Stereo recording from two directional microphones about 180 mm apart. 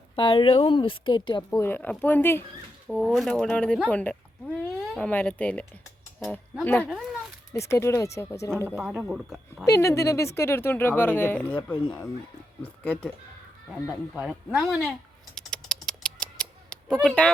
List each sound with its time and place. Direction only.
0.2 s speech: 30° left (ahead or behind)
1.5 s speech: 10° left (ahead or behind)
7.5 s speech: 15° left (ahead or behind)
8.5 s speech: 10° right (ahead or behind)
9.6 s speech: 15° left (ahead or behind)
13.7 s speech: centre (ahead or behind)
15.4 s typewriter: 5° left (ahead or behind)